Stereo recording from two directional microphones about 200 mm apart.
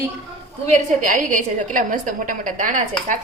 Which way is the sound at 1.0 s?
40° right (ahead or behind).